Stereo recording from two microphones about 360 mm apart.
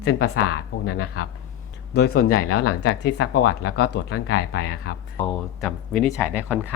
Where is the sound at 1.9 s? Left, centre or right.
Left.